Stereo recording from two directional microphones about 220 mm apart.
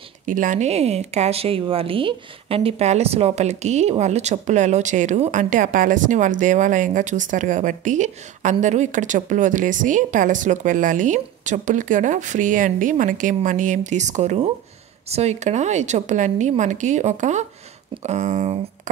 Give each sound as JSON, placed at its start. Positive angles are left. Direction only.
{"t": 0.3, "sound": "speech", "side_deg": -35}